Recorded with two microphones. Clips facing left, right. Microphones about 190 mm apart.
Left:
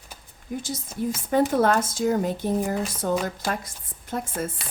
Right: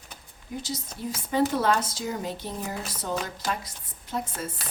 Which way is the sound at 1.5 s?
50° left (ahead or behind).